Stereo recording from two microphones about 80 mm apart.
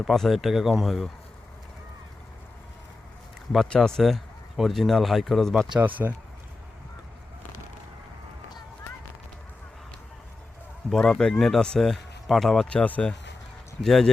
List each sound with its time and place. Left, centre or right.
0.0 s speech: centre
3.8 s speech: centre
5.8 s speech: right
10.8 s speech: centre
12.6 s speech: centre
13.8 s speech: centre